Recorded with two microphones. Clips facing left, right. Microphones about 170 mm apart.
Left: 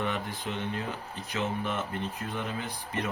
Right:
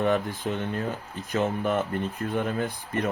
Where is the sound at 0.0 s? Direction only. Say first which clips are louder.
Right 8 dB; 45° right (ahead or behind).